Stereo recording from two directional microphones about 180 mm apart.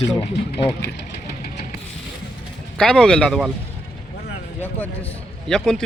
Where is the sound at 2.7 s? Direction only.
5° left (ahead or behind).